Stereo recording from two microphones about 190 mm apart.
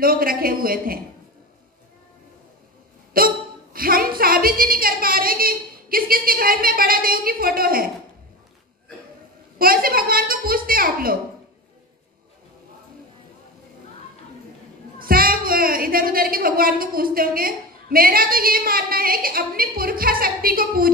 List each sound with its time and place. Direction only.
0.0 s a child's voice: 50° right (ahead or behind)
3.1 s a child's voice: 50° right (ahead or behind)
9.6 s a child's voice: 50° right (ahead or behind)
15.0 s a child's voice: 50° right (ahead or behind)